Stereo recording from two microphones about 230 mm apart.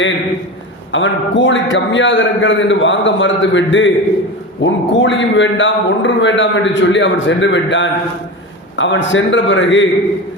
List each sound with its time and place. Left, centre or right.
0.9 s a man's voice: left